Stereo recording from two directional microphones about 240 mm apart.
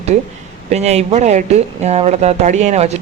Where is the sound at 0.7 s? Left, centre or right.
Right.